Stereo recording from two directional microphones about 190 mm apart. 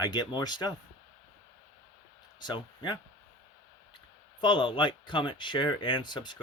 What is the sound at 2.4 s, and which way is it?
Speech, 25° left (ahead or behind).